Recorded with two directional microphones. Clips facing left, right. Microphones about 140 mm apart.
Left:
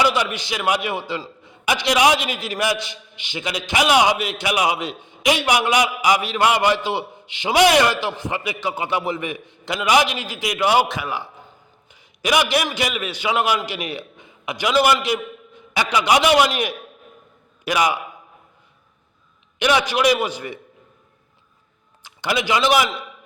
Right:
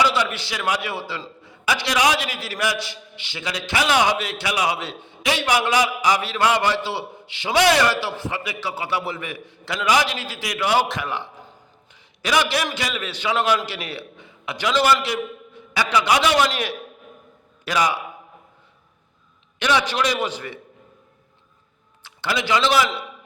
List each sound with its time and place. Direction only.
0.0 s a man's voice: 15° left (ahead or behind)
10.8 s a man's voice: 5° left (ahead or behind)
19.5 s a man's voice: 15° left (ahead or behind)
22.0 s a man's voice: 15° left (ahead or behind)